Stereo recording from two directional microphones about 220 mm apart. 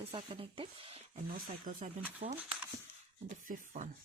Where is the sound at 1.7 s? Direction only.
40° right (ahead or behind).